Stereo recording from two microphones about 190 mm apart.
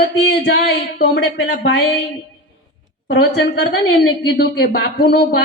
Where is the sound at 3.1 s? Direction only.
60° left (ahead or behind).